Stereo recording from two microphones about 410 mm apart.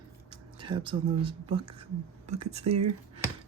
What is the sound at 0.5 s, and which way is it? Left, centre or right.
Speech, centre.